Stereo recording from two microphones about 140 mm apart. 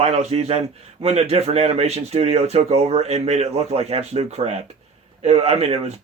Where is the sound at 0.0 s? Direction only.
50° right (ahead or behind).